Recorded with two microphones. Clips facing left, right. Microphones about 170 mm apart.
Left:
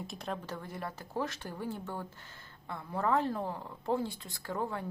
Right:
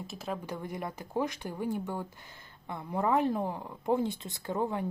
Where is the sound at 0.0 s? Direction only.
Centre (ahead or behind).